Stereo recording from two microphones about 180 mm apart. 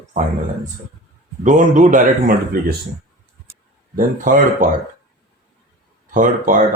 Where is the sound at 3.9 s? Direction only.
50° right (ahead or behind).